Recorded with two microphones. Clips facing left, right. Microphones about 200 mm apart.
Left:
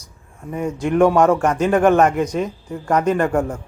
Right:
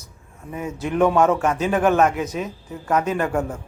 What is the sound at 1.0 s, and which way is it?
Speech, 10° left (ahead or behind).